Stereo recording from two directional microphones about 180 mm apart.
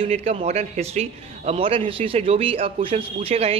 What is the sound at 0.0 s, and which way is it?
A man's voice, 35° right (ahead or behind).